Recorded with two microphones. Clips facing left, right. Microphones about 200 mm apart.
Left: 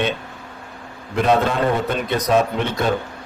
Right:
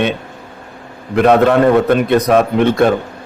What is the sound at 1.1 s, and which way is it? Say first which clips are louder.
A man's voice: right 8 dB; 65° right (ahead or behind).